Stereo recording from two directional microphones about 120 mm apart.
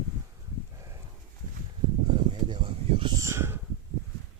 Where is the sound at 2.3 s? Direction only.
40° right (ahead or behind).